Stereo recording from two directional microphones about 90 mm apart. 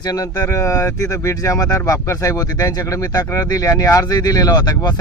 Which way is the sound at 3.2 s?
30° left (ahead or behind).